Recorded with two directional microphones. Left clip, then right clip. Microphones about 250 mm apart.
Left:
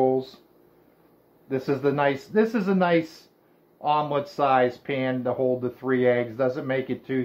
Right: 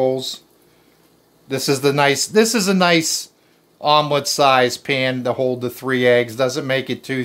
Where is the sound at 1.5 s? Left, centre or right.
Right.